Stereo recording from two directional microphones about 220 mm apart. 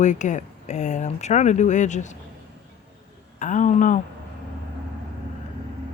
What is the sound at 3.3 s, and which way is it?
Speech, 35° left (ahead or behind).